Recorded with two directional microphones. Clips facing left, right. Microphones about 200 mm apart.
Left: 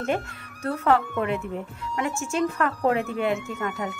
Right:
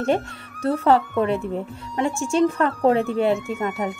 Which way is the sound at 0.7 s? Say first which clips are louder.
Right 4 dB; 30° right (ahead or behind).